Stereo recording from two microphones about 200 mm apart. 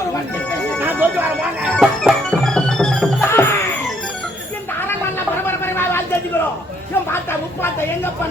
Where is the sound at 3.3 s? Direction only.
10° left (ahead or behind).